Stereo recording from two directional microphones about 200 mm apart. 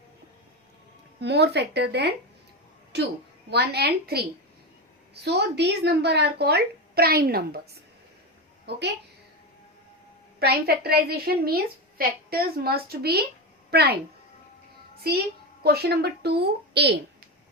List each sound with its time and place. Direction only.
1.2 s speech: 55° right (ahead or behind)
3.5 s a woman's voice: 55° right (ahead or behind)
10.4 s a woman's voice: 50° right (ahead or behind)
15.6 s a woman's voice: 55° right (ahead or behind)